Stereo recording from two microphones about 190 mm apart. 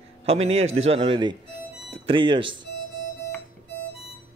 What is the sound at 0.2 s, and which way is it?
Speech, 35° right (ahead or behind).